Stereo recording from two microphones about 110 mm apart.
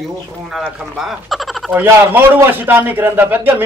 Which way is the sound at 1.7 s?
20° right (ahead or behind).